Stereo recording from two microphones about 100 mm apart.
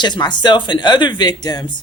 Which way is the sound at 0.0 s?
45° left (ahead or behind).